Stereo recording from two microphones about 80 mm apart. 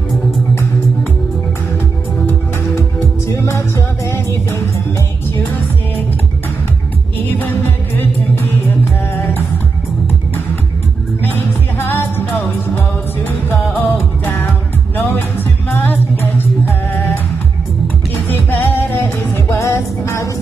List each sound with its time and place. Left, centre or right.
3.3 s music: left
10.0 s music: left